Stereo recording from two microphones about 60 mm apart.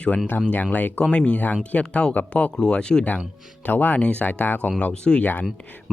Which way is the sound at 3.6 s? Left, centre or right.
Left.